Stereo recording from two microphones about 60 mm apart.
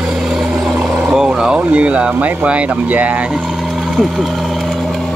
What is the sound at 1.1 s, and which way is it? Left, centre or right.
Vehicle, centre.